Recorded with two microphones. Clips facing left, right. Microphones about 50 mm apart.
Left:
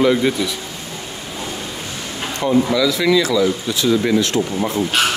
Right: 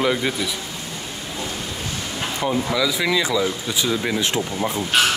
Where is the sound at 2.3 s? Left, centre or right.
Centre.